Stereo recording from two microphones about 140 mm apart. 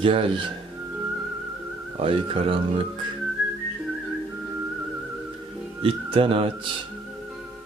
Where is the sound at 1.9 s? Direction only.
40° right (ahead or behind).